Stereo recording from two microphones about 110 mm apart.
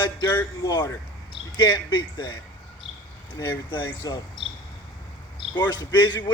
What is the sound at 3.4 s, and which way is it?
Speech, 25° left (ahead or behind).